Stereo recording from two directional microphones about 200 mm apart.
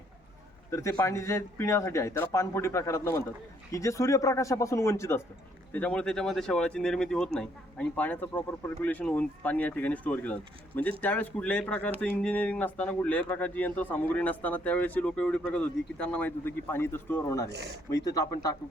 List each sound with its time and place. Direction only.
0.7 s speech: 15° left (ahead or behind)